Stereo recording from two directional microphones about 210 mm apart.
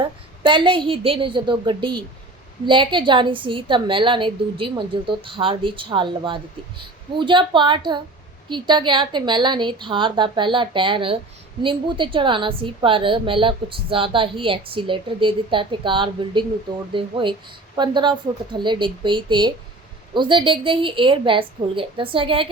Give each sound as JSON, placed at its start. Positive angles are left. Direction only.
{"t": 0.0, "sound": "a woman's voice", "side_deg": -25}